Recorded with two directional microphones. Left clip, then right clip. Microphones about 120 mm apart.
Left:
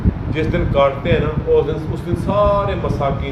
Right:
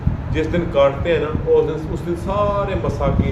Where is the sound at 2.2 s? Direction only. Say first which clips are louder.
Left 4 dB; centre (ahead or behind).